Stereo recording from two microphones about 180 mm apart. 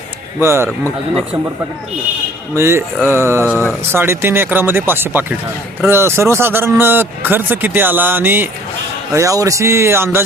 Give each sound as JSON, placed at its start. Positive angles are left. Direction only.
{"t": 0.3, "sound": "a man's voice", "side_deg": -15}
{"t": 2.6, "sound": "a man's voice", "side_deg": -15}